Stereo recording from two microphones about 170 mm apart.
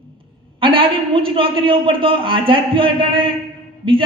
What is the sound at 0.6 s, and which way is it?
A man's voice, 30° right (ahead or behind).